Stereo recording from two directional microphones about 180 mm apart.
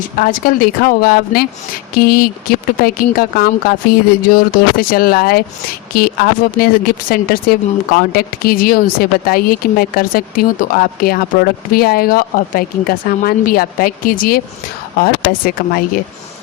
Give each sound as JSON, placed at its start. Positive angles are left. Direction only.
{"t": 0.2, "sound": "speech", "side_deg": 50}